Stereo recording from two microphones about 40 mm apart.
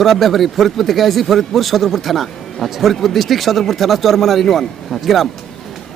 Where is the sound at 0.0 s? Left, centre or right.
Centre.